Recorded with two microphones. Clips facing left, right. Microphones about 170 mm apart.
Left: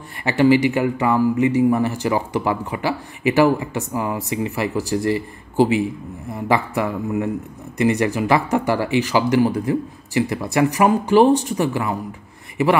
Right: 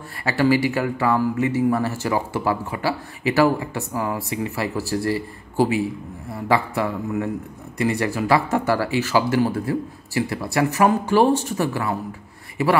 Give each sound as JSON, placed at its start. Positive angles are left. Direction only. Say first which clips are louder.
{"t": 0.2, "sound": "speech", "louder": "left 4 dB", "side_deg": 20}